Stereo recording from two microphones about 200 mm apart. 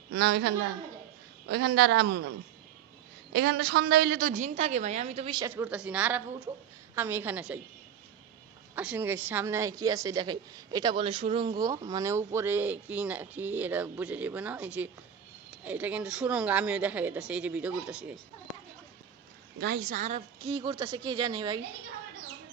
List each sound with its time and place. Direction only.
0.1 s a man's voice: 55° right (ahead or behind)
3.3 s a woman's voice: 55° right (ahead or behind); by 7.6 s 5° right (ahead or behind)
8.7 s a woman's voice: 5° right (ahead or behind)
19.5 s a woman's voice: 50° right (ahead or behind); by 21.6 s 20° right (ahead or behind)